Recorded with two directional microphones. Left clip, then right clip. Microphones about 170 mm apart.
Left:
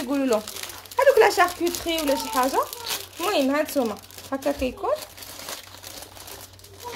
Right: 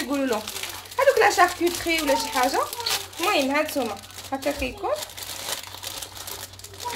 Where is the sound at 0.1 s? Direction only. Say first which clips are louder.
Left 4 dB; 45° left (ahead or behind).